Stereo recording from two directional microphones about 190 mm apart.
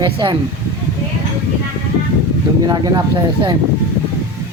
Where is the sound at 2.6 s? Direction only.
20° right (ahead or behind).